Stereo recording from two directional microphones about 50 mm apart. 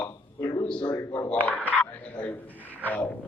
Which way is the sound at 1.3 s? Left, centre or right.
Left.